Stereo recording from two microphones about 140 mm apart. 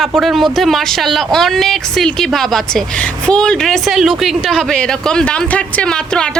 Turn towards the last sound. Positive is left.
turn(degrees=5)  # may be behind; listen again after turning